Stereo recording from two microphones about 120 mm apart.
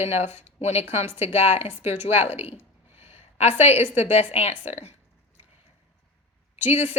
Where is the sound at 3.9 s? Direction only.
65° left (ahead or behind).